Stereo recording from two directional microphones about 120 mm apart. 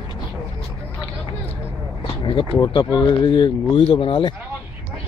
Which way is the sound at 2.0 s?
45° left (ahead or behind).